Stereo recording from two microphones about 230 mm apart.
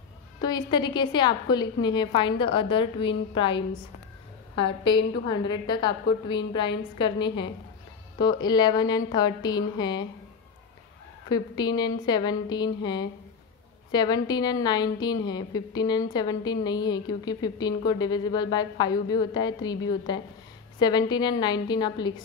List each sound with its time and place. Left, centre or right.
0.4 s a woman's voice: centre
11.2 s a woman's voice: centre